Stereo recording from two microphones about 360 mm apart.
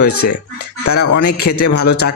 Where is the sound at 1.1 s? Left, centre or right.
Left.